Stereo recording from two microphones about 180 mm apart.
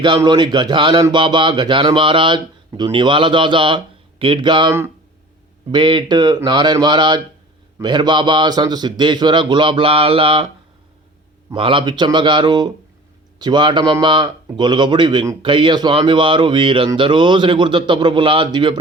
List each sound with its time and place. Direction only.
0.2 s a man's voice: 25° right (ahead or behind)
5.7 s a man's voice: 25° right (ahead or behind)
11.5 s a man's voice: 30° right (ahead or behind)